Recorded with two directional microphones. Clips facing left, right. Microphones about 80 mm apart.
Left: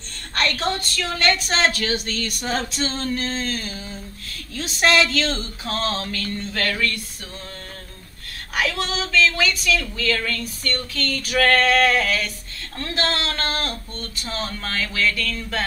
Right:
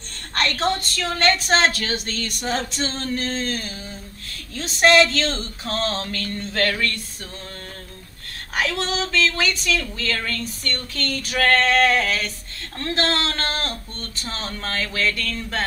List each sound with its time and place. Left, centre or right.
0.3 s a sound: right
0.9 s a woman's voice: right
8.5 s a woman's voice: right